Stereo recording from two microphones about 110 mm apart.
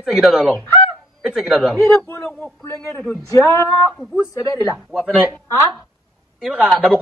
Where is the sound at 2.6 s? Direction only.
20° left (ahead or behind).